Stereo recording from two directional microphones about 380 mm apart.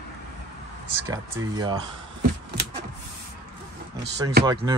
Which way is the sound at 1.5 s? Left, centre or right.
Centre.